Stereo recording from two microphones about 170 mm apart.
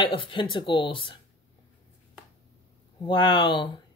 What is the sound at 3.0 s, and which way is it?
Speech, 30° left (ahead or behind).